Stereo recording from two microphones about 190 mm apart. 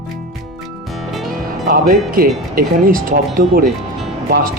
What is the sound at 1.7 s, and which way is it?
Speech, 50° right (ahead or behind).